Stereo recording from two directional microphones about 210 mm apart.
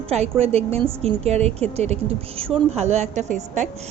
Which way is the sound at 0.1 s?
30° right (ahead or behind).